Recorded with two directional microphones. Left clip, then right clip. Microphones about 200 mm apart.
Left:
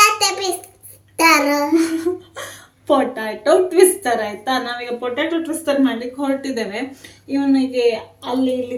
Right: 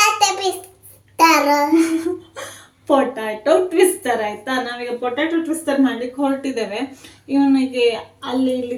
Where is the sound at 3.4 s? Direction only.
5° right (ahead or behind).